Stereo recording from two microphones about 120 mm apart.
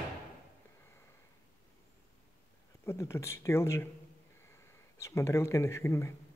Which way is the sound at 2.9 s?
25° left (ahead or behind).